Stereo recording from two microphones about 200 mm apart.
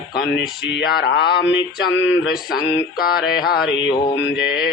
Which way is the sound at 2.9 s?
50° left (ahead or behind).